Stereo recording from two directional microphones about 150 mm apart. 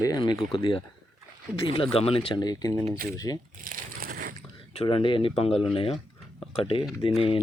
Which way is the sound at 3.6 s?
70° right (ahead or behind).